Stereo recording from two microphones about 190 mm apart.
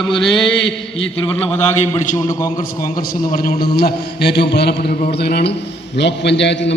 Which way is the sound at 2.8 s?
50° left (ahead or behind).